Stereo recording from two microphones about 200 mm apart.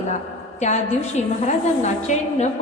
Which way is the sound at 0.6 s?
35° left (ahead or behind).